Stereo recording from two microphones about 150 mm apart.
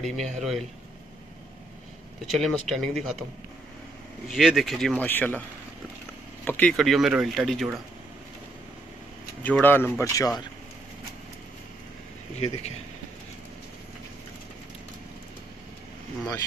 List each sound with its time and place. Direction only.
0.0 s speech: centre (ahead or behind)
2.3 s speech: centre (ahead or behind)
4.3 s speech: centre (ahead or behind)
6.4 s speech: 10° left (ahead or behind)
6.8 s speech: centre (ahead or behind)
9.4 s speech: 10° left (ahead or behind)
12.4 s speech: 45° left (ahead or behind)